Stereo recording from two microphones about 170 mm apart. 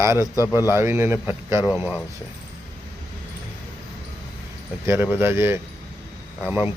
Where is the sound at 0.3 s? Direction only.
20° left (ahead or behind).